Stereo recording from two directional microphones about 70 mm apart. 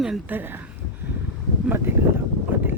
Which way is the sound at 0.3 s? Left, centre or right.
Right.